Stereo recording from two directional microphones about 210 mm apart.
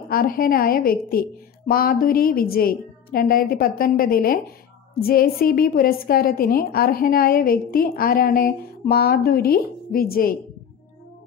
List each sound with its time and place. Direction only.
0.1 s a woman's voice: 45° left (ahead or behind)